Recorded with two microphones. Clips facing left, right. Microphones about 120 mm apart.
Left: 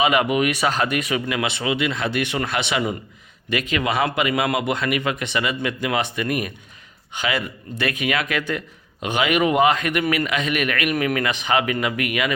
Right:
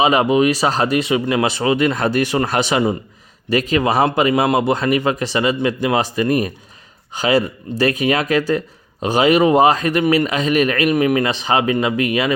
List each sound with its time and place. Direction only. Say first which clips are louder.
0.0 s speech: right 5 dB; 30° right (ahead or behind)